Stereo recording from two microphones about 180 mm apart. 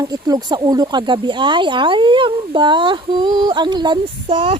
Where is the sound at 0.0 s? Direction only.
20° right (ahead or behind).